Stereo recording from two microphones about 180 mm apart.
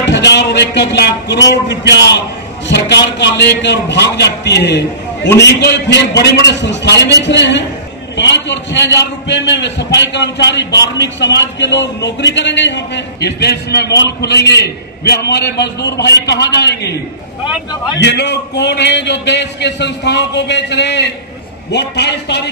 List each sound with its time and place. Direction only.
0.0 s a man's voice: 70° left (ahead or behind)
18.0 s a man's voice: 70° left (ahead or behind)